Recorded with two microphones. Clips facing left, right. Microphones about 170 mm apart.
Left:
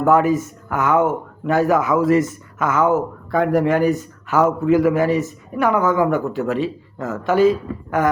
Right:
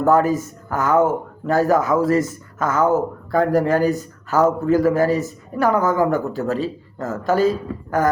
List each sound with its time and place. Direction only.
0.0 s speech: 40° right (ahead or behind)